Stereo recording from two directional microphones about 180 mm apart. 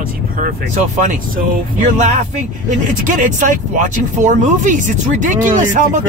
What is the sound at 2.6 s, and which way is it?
Speech, 45° right (ahead or behind).